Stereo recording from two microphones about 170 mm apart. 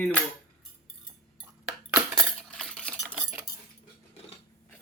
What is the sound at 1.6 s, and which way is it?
Cutlery, 10° right (ahead or behind).